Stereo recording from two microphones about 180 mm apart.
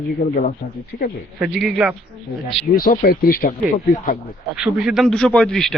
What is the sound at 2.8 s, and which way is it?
A man's voice, 55° left (ahead or behind).